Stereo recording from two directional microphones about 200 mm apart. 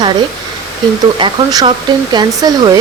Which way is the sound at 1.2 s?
20° right (ahead or behind).